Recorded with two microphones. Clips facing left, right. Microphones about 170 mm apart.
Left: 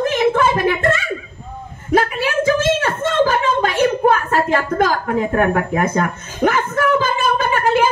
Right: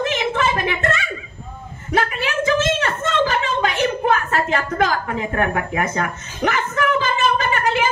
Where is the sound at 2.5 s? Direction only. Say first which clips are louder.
Left 2 dB; 45° left (ahead or behind).